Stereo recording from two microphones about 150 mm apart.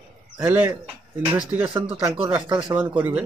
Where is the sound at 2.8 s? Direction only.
15° right (ahead or behind).